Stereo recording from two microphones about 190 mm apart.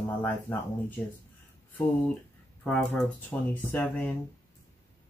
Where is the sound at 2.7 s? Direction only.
5° left (ahead or behind).